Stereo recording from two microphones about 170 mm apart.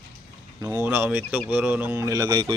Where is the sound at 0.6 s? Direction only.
15° right (ahead or behind).